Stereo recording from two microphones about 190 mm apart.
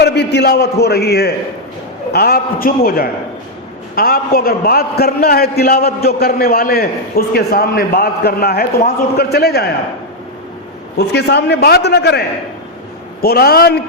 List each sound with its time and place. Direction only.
0.0 s a man's voice: 60° left (ahead or behind)
10.9 s a man's voice: 60° left (ahead or behind)
13.2 s a man's voice: 55° left (ahead or behind)